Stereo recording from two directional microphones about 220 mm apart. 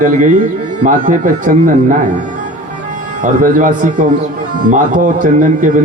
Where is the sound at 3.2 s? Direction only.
35° right (ahead or behind).